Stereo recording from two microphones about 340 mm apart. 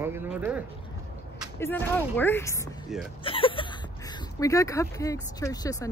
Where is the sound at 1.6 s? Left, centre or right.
Centre.